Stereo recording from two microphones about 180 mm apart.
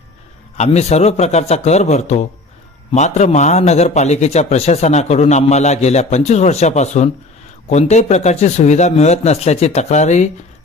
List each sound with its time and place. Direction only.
0.5 s a man's voice: 35° left (ahead or behind)